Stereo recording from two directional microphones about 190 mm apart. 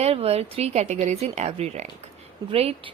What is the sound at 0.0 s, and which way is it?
A woman's voice, 30° right (ahead or behind).